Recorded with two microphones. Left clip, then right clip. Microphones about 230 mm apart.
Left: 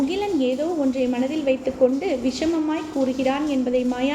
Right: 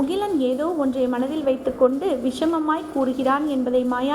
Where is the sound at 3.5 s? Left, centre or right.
Centre.